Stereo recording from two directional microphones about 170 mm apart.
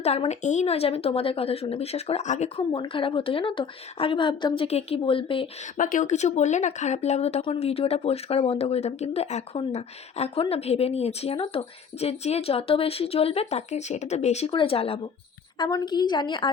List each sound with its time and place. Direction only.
0.0 s speech: 40° left (ahead or behind)
2.6 s speech: 30° left (ahead or behind)
5.7 s a woman's voice: 50° left (ahead or behind); by 16.5 s 25° left (ahead or behind)